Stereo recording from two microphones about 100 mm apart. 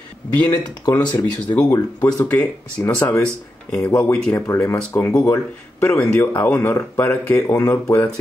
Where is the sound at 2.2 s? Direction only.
15° left (ahead or behind).